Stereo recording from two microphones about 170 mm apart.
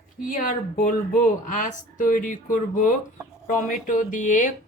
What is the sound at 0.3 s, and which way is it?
Speech, 50° left (ahead or behind).